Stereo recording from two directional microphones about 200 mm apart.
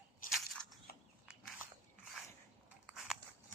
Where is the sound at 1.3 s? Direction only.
Centre (ahead or behind).